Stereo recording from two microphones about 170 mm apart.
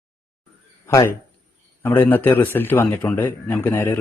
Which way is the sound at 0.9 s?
20° left (ahead or behind).